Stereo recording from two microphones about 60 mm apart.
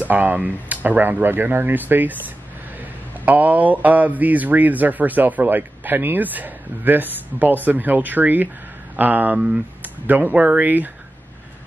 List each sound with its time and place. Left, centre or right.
0.0 s speech: right
9.8 s a sound: right
10.3 s speech: right